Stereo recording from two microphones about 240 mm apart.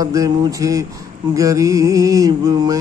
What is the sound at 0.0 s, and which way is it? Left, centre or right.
A man's voice, centre.